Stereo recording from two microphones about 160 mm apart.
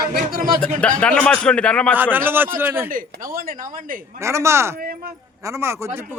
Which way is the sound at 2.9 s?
60° right (ahead or behind).